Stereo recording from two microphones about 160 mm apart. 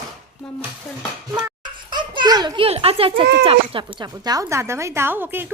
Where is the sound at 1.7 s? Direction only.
30° right (ahead or behind).